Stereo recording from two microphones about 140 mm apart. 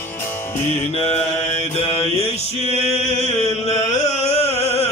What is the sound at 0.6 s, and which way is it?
Mantra, 50° left (ahead or behind).